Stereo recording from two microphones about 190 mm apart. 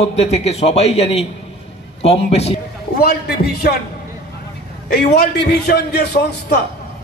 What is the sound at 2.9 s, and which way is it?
Speech, 55° left (ahead or behind).